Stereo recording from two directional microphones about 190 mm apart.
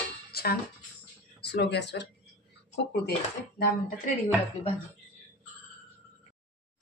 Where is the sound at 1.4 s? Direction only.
60° left (ahead or behind).